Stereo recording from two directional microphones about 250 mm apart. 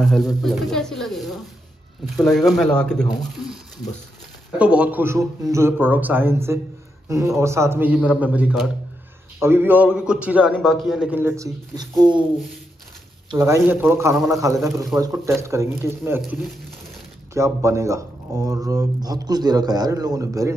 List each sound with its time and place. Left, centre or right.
0.0 s a man's voice: centre
4.6 s a man's voice: centre
13.3 s speech: centre